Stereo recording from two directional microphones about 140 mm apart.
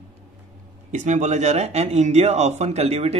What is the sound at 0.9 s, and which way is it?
A man's voice, 60° right (ahead or behind).